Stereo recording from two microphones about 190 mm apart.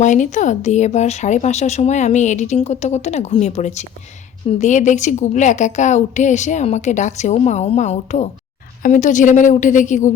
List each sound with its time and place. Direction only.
0.0 s speech: 40° left (ahead or behind)